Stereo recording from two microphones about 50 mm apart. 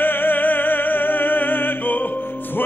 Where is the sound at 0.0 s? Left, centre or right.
Left.